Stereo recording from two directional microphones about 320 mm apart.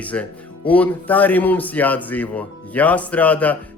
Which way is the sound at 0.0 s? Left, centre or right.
Centre.